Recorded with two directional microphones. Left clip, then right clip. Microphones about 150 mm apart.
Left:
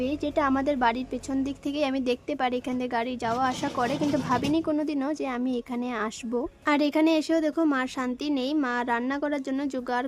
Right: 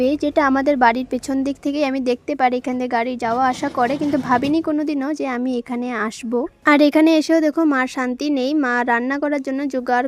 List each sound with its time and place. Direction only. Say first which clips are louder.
0.0 s speech: right 9 dB; 45° right (ahead or behind)
6.7 s speech: right 10 dB; 55° right (ahead or behind)